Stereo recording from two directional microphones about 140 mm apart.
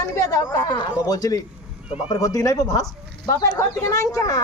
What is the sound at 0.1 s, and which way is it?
Speech, 20° left (ahead or behind).